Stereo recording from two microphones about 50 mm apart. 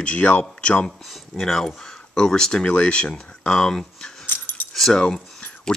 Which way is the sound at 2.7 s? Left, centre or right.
Left.